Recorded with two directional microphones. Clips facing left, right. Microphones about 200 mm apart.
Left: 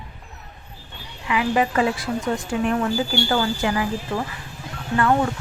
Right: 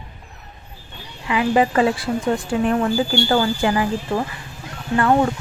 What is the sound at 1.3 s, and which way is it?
A woman's voice, 30° right (ahead or behind).